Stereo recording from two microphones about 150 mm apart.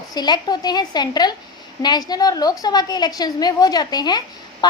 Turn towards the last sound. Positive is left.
turn(degrees=30)  # may be behind; listen again after turning